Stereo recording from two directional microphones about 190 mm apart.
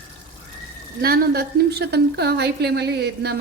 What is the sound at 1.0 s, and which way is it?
A woman's voice, 50° right (ahead or behind).